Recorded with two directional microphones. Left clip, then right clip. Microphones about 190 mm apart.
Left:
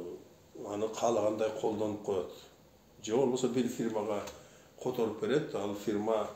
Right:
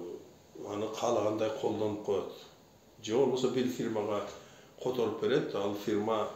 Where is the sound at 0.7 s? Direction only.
45° left (ahead or behind).